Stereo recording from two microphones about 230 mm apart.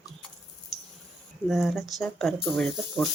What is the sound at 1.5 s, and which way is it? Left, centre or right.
Speech, centre.